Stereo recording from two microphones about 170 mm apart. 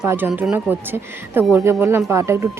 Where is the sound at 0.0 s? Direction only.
15° right (ahead or behind).